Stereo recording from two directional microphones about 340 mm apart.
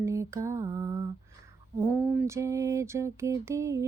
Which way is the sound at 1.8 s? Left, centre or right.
Centre.